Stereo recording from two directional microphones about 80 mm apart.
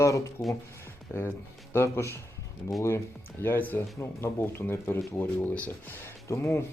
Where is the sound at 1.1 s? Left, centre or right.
Left.